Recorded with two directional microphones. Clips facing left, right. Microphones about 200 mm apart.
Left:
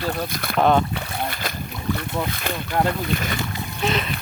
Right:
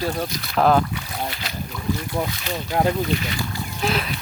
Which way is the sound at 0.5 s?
Centre (ahead or behind).